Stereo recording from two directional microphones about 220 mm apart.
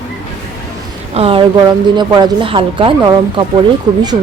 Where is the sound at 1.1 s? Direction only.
25° right (ahead or behind).